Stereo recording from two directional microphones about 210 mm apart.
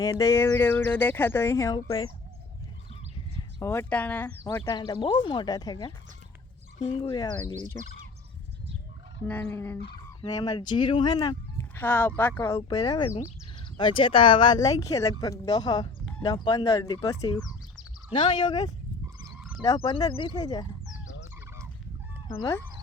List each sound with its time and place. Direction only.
0.0 s speech: 15° left (ahead or behind)
3.3 s speech: 10° left (ahead or behind)
9.2 s speech: 10° left (ahead or behind)
19.4 s frog: 5° right (ahead or behind)
19.6 s speech: 20° left (ahead or behind)
22.3 s speech: 15° left (ahead or behind)